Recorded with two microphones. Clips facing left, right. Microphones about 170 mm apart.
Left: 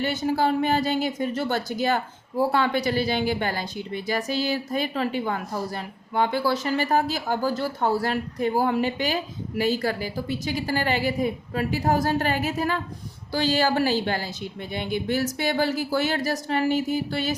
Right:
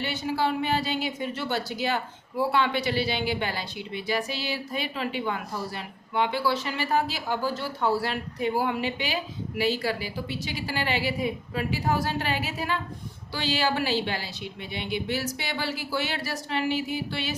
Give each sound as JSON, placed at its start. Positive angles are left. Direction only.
{"t": 0.0, "sound": "speech", "side_deg": 45}